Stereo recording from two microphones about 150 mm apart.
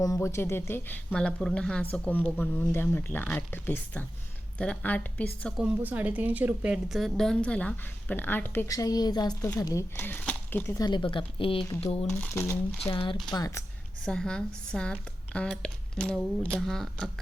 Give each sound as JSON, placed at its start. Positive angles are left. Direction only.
{"t": 0.0, "sound": "speech", "side_deg": 20}
{"t": 5.5, "sound": "speech", "side_deg": -10}
{"t": 10.8, "sound": "a woman's voice", "side_deg": 30}
{"t": 12.1, "sound": "speech", "side_deg": 15}
{"t": 12.9, "sound": "a woman's voice", "side_deg": 35}
{"t": 13.3, "sound": "speech", "side_deg": 20}
{"t": 14.0, "sound": "speech", "side_deg": 5}